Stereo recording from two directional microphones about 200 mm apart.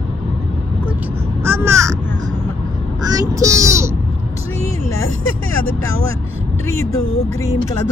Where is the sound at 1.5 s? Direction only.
15° right (ahead or behind).